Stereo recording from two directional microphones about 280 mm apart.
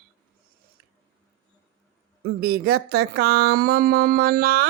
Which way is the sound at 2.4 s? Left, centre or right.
Right.